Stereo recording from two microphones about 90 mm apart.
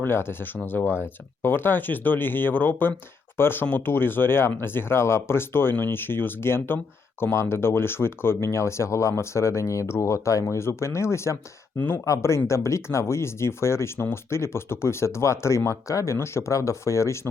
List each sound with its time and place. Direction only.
0.0 s speech: 25° left (ahead or behind)